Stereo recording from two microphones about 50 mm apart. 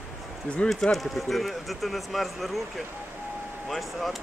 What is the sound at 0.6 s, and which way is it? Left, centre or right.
Speech, centre.